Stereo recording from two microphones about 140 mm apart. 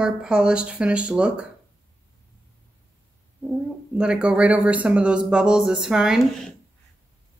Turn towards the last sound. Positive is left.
turn(degrees=0)  # may be behind; listen again after turning